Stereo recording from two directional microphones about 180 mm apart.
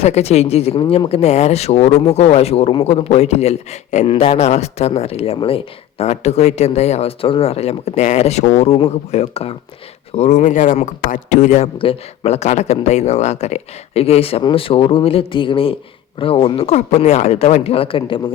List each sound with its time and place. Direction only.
0.0 s speech: 35° left (ahead or behind)